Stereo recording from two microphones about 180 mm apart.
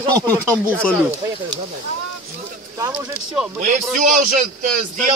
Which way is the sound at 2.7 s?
15° right (ahead or behind).